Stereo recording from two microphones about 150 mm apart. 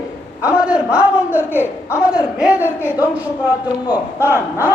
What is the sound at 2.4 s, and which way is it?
Speech, 10° right (ahead or behind).